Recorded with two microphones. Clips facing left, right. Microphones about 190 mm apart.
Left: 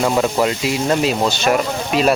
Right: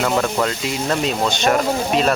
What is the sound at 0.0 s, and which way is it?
Speech, 15° left (ahead or behind).